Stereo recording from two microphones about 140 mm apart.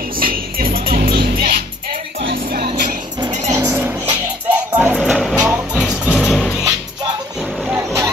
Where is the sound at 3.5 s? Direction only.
20° right (ahead or behind).